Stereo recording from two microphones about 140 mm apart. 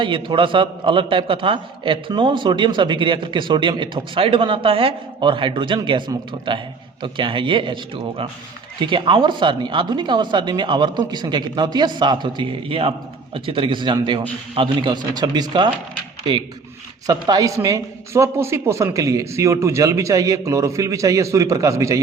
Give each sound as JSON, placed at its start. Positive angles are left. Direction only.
{"t": 0.0, "sound": "a man's voice", "side_deg": -35}
{"t": 17.1, "sound": "a woman's voice", "side_deg": -25}